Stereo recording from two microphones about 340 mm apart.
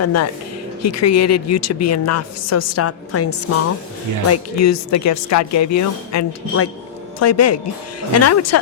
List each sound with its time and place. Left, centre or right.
0.0 s a woman's voice: left
4.3 s a woman's voice: left